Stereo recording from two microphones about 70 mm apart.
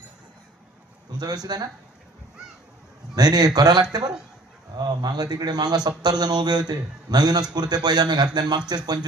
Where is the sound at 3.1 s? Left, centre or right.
Right.